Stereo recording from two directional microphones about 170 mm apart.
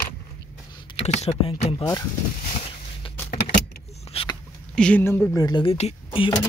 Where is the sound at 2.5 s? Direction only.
35° left (ahead or behind).